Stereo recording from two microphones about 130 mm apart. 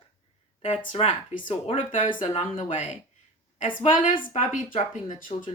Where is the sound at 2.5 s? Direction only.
65° left (ahead or behind).